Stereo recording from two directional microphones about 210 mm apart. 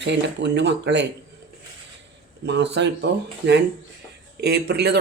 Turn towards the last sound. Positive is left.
turn(degrees=-50)  # may be behind; listen again after turning